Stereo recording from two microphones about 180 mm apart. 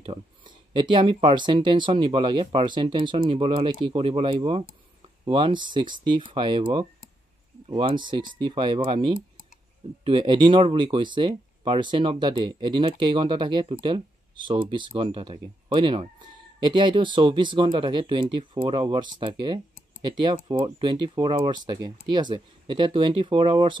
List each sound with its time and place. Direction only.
0.7 s speech: 25° right (ahead or behind)